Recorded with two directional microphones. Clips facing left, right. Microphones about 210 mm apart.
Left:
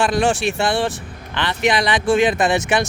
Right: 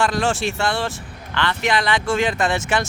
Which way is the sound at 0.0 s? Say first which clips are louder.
Left 3 dB; 15° left (ahead or behind).